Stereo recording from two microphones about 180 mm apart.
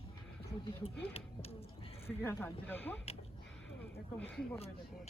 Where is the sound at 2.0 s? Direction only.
15° left (ahead or behind).